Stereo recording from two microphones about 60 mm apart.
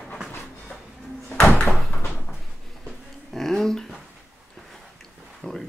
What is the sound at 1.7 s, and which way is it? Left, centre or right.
Door, centre.